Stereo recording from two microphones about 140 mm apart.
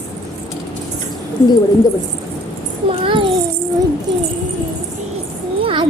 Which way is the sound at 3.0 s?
40° right (ahead or behind).